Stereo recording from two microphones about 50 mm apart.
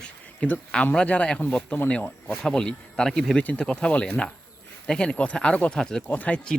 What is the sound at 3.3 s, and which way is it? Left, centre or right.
Speech, left.